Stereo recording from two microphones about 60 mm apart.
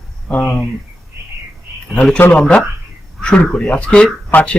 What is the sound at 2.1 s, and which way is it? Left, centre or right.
Speech, left.